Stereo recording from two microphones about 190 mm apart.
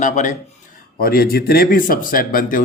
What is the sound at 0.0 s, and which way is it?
Speech, 40° left (ahead or behind).